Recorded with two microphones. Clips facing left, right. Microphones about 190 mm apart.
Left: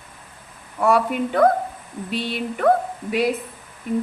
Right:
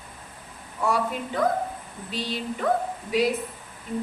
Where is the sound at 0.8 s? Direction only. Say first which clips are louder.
Left 7 dB; 60° left (ahead or behind).